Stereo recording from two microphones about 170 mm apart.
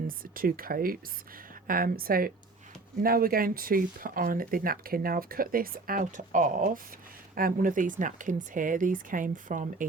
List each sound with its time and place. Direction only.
0.3 s speech: 55° right (ahead or behind)